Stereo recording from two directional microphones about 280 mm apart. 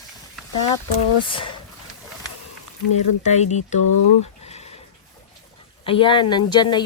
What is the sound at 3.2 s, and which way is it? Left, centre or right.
Speech, left.